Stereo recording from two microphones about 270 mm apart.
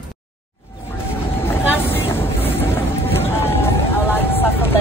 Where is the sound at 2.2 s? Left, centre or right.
Left.